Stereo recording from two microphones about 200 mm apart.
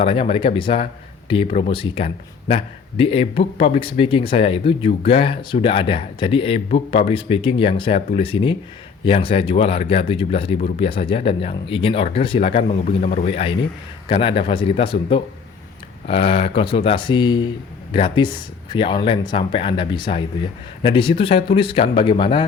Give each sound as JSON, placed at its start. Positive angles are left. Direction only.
{"t": 0.0, "sound": "speech", "side_deg": 25}
{"t": 13.0, "sound": "a man's voice", "side_deg": 45}
{"t": 13.2, "sound": "speech", "side_deg": 30}